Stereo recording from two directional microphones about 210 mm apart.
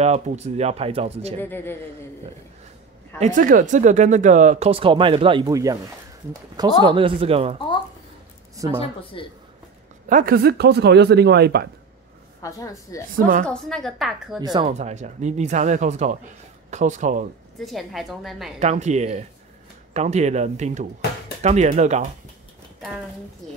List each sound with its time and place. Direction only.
0.0 s speech: 30° right (ahead or behind)
1.4 s a woman's voice: 10° left (ahead or behind)
3.2 s speech: 40° right (ahead or behind); by 5.8 s 15° right (ahead or behind)
6.8 s speech: 25° right (ahead or behind)
9.1 s speech: 25° left (ahead or behind)
10.0 s speech: 40° right (ahead or behind)
12.4 s a woman's voice: 15° left (ahead or behind)
13.1 s speech: 40° right (ahead or behind)
13.5 s a woman's voice: 5° left (ahead or behind)
14.4 s speech: 20° right (ahead or behind)
14.7 s speech: 35° right (ahead or behind)
17.6 s a woman's voice: centre (ahead or behind)
18.6 s speech: 35° right (ahead or behind)